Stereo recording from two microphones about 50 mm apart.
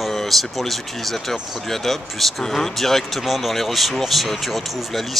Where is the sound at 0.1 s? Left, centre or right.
Centre.